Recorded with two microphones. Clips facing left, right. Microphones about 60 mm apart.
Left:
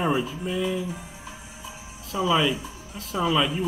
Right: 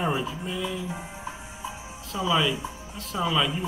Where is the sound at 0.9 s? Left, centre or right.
Right.